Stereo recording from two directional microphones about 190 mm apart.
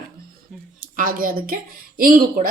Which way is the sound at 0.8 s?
45° right (ahead or behind).